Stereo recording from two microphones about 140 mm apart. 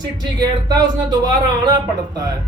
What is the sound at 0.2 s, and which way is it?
Speech, 25° right (ahead or behind).